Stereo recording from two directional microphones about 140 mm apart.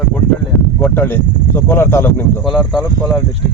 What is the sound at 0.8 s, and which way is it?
Speech, 15° left (ahead or behind).